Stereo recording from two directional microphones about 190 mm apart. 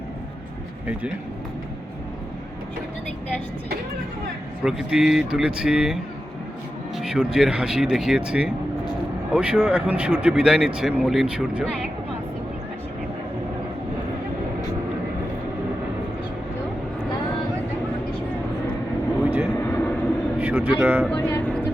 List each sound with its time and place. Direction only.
4.6 s a man's voice: 5° right (ahead or behind)
19.2 s vehicle: 10° right (ahead or behind)
19.5 s vehicle: 10° left (ahead or behind)
20.4 s vehicle: 5° right (ahead or behind)
20.7 s speech: 10° right (ahead or behind)
21.1 s music: 10° left (ahead or behind)